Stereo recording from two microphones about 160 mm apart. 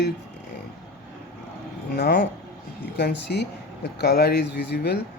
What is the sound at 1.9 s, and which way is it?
Speech, 90° left.